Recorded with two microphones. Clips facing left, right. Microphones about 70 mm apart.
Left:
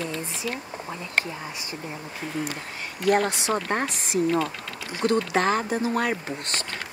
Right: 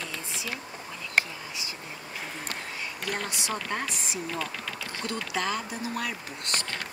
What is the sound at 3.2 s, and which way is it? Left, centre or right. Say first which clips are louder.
Speech: left 7 dB; left.